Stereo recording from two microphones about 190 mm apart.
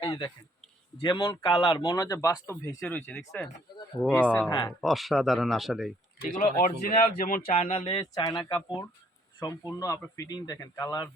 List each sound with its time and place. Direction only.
0.0 s a sound: 20° left (ahead or behind)
0.9 s speech: 25° left (ahead or behind); by 4.4 s 10° left (ahead or behind)
4.4 s speech: 20° left (ahead or behind)
4.8 s speech: centre (ahead or behind)
6.4 s speech: 50° left (ahead or behind)
7.4 s speech: 30° left (ahead or behind)